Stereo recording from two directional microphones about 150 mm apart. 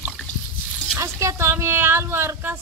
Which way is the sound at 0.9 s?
20° right (ahead or behind).